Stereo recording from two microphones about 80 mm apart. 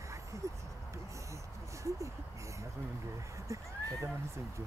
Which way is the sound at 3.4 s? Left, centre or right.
Right.